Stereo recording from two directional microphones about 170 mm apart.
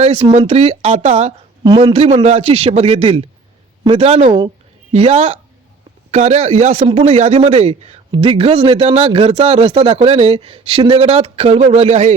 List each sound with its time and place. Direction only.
0.0 s speech: 35° right (ahead or behind)